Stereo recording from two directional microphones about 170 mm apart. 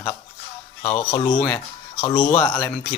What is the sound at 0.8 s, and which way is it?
Speech, 30° left (ahead or behind).